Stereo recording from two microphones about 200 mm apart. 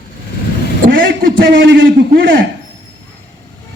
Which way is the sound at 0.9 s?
65° right (ahead or behind).